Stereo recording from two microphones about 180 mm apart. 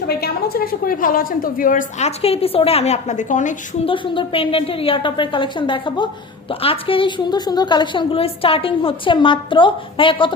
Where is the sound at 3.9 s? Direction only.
30° left (ahead or behind).